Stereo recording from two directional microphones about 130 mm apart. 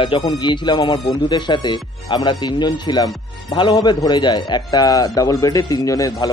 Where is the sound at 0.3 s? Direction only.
35° left (ahead or behind).